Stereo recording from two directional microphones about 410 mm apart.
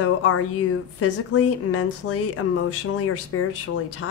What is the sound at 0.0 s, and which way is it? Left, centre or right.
Speech, left.